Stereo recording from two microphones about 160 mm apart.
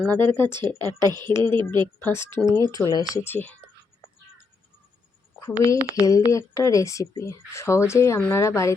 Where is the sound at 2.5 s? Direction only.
20° left (ahead or behind).